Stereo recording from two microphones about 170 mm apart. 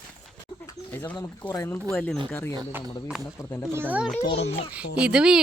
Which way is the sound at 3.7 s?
10° right (ahead or behind).